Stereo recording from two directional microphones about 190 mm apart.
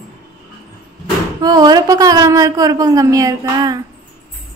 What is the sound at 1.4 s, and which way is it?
A woman's voice, 20° right (ahead or behind).